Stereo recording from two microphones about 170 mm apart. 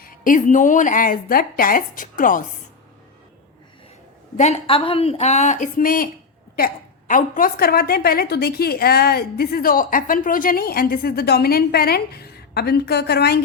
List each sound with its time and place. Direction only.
0.0 s speech: 50° left (ahead or behind)
4.4 s a woman's voice: 40° left (ahead or behind); by 6.7 s 65° left (ahead or behind)
7.1 s a woman's voice: 50° left (ahead or behind); by 13.4 s 70° left (ahead or behind)